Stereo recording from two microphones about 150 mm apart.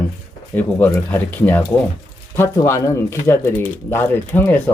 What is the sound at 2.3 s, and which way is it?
Speech, 15° left (ahead or behind).